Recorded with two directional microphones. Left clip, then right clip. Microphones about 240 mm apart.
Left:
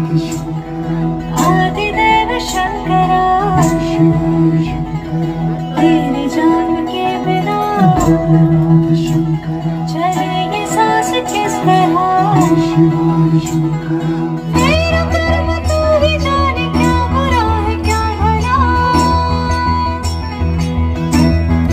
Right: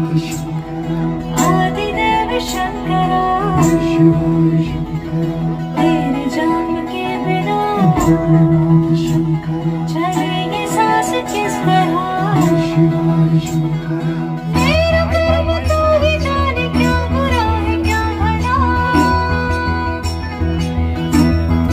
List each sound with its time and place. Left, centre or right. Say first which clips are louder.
1.6 s music: left 3 dB; left
5.8 s music: left 3 dB; left
10.8 s music: left 2 dB; left
14.5 s music: left 1 dB; left
21.1 s music: left 1 dB; left